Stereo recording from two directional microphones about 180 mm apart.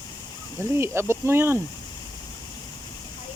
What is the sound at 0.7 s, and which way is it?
Speech, 15° right (ahead or behind).